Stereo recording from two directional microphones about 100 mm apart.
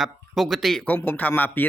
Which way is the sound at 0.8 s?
15° left (ahead or behind).